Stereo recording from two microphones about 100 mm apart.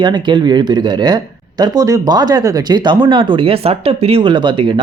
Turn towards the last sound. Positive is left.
turn(degrees=-55)  # may be behind; listen again after turning